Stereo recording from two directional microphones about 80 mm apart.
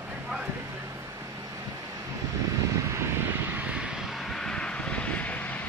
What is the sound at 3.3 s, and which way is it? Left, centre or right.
Vehicle, right.